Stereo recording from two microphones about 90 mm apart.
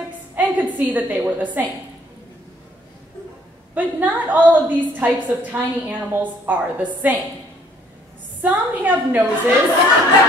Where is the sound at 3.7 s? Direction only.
20° right (ahead or behind).